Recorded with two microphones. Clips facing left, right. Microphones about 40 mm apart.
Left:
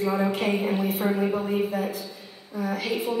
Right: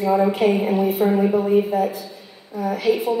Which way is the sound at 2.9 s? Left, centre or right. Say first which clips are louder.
Right 13 dB; centre.